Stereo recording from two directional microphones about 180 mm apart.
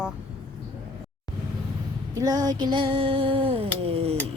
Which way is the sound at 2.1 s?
20° right (ahead or behind).